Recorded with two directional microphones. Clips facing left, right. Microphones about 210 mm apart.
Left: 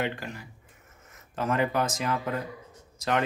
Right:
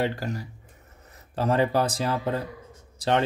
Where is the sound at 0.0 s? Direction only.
35° right (ahead or behind).